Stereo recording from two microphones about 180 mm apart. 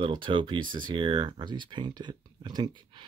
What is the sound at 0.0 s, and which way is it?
Speech, 30° right (ahead or behind).